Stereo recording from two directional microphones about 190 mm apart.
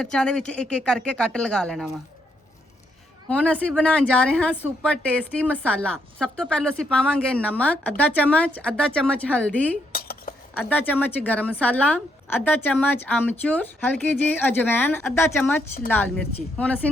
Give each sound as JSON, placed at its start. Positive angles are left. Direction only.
{"t": 0.0, "sound": "speech", "side_deg": 5}
{"t": 3.2, "sound": "speech", "side_deg": 5}
{"t": 9.9, "sound": "dishes", "side_deg": 50}
{"t": 10.5, "sound": "speech", "side_deg": 10}
{"t": 13.1, "sound": "speech", "side_deg": 5}